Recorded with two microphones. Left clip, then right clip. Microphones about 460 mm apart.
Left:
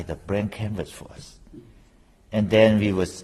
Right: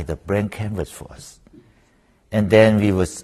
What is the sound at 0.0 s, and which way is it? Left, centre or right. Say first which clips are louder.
A man's voice: right 4 dB; right.